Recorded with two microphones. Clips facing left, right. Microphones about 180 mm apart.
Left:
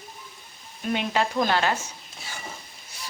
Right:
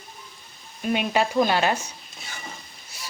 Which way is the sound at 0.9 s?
15° right (ahead or behind).